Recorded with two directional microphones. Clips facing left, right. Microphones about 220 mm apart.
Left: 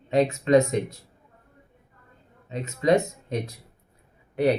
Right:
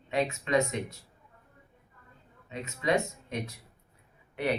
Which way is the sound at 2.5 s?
35° left (ahead or behind).